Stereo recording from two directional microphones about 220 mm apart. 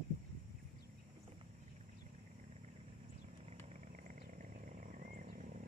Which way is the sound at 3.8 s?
35° right (ahead or behind).